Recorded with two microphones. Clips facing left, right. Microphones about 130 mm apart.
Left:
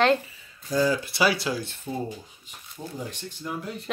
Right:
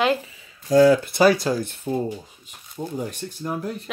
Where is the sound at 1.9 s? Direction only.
70° right (ahead or behind).